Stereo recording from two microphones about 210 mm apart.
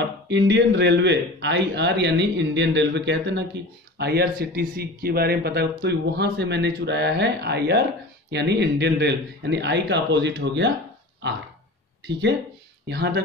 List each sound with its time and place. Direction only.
0.3 s speech: 55° right (ahead or behind)
12.8 s speech: 50° right (ahead or behind)